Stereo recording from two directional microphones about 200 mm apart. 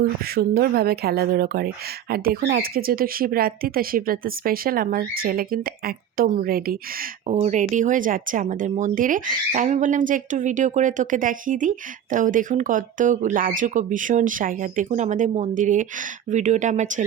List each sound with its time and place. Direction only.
0.0 s speech: 50° right (ahead or behind)
7.3 s speech: 35° right (ahead or behind)